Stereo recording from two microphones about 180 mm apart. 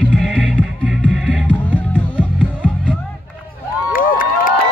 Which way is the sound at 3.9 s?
50° left (ahead or behind).